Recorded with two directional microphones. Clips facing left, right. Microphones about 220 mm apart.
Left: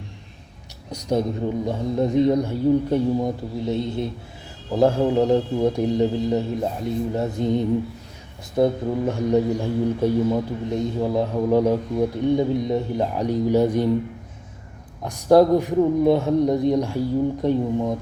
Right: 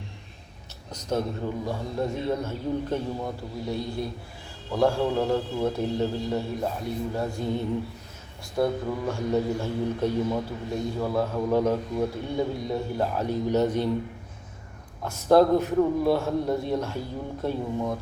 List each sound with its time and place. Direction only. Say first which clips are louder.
0.9 s a man's voice: left 5 dB; 15° left (ahead or behind)
15.0 s speech: left 4 dB; 15° left (ahead or behind)